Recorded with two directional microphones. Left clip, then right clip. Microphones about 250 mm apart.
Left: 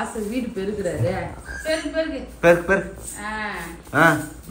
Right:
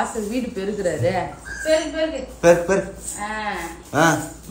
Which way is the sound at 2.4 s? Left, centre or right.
Centre.